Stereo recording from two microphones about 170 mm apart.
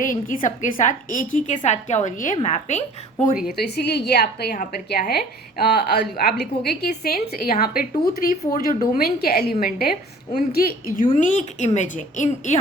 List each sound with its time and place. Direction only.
0.0 s a woman's voice: 50° left (ahead or behind)
3.8 s a woman's voice: 75° left (ahead or behind)
11.2 s a woman's voice: 45° left (ahead or behind)